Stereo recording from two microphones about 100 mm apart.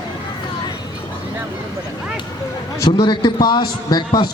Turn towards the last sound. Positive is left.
turn(degrees=45)  # may be behind; listen again after turning